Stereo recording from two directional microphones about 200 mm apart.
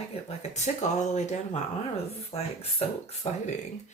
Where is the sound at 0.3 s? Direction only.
35° left (ahead or behind).